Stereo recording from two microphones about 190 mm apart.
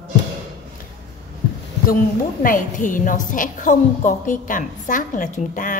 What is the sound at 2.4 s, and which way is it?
A woman's voice, 45° left (ahead or behind).